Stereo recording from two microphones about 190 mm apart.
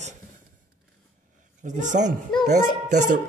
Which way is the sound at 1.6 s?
40° right (ahead or behind).